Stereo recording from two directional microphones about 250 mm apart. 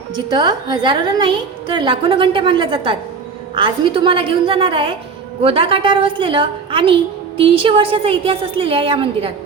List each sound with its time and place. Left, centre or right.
0.3 s a woman's voice: centre